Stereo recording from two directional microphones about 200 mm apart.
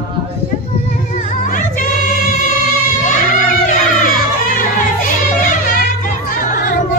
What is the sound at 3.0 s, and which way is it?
Music, 40° left (ahead or behind).